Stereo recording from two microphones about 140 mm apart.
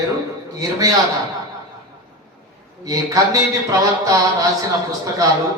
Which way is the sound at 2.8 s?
25° right (ahead or behind).